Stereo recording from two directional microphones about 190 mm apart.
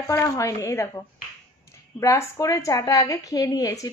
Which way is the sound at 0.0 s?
15° left (ahead or behind).